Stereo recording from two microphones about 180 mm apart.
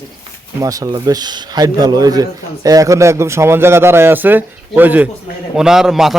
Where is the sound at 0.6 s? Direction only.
20° right (ahead or behind).